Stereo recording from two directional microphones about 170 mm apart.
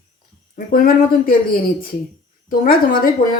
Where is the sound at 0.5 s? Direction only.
60° left (ahead or behind).